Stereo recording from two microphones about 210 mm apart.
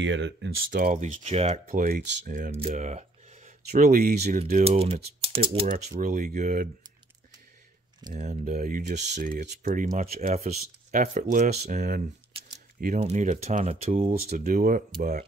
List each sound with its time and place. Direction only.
0.0 s speech: 60° right (ahead or behind)
0.7 s speech: 40° right (ahead or behind)
4.6 s speech: 30° right (ahead or behind)
5.7 s speech: 40° right (ahead or behind)
8.1 s speech: 40° right (ahead or behind)
14.3 s speech: 40° right (ahead or behind)